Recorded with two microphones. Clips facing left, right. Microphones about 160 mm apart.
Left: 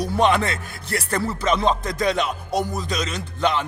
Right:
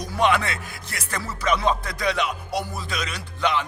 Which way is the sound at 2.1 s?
30° left (ahead or behind).